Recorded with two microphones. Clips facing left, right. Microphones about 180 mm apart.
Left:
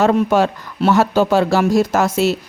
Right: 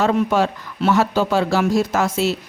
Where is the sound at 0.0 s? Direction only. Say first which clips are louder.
Left 3 dB; 45° left (ahead or behind).